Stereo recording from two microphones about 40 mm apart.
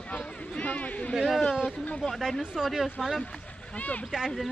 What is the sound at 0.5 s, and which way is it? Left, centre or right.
Speech, left.